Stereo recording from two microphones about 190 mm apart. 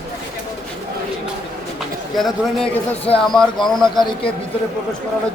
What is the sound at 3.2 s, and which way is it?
Speech, centre (ahead or behind).